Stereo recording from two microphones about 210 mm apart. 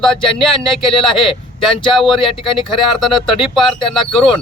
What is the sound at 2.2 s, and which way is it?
Speech, 25° left (ahead or behind).